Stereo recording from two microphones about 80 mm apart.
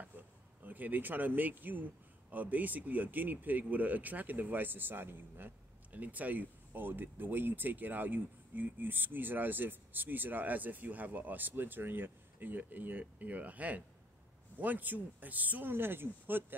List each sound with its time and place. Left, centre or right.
0.7 s speech: right